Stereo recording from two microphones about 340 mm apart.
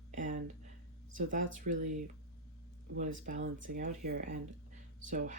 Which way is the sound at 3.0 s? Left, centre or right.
Right.